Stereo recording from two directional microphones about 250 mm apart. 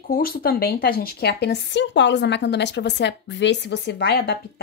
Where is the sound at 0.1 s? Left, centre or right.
Left.